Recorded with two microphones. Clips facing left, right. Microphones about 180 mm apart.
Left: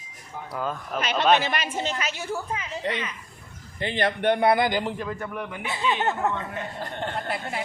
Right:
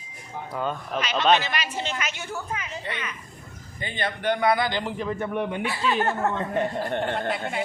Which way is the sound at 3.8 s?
65° left (ahead or behind).